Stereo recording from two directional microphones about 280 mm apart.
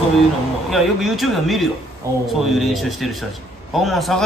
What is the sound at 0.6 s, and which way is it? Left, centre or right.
A man's voice, centre.